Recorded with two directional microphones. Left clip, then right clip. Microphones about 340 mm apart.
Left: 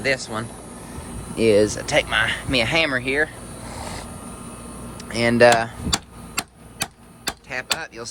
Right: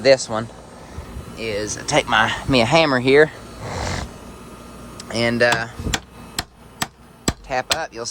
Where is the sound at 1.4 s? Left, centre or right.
Centre.